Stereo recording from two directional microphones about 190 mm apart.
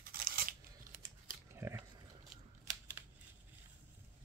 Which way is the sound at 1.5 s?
15° right (ahead or behind).